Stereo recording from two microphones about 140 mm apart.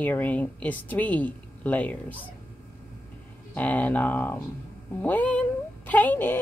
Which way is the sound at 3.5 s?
10° left (ahead or behind).